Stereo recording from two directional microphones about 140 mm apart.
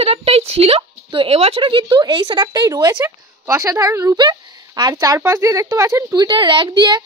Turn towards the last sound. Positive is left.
turn(degrees=-30)  # may be behind; listen again after turning